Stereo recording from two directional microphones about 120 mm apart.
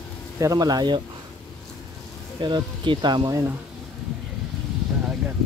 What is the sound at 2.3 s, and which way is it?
Speech, 40° right (ahead or behind).